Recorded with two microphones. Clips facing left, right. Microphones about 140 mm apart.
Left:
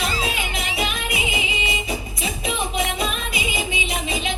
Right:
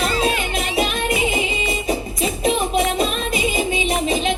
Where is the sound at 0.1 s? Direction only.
60° right (ahead or behind).